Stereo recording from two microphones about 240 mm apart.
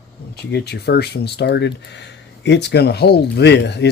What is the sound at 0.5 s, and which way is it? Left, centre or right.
Speech, left.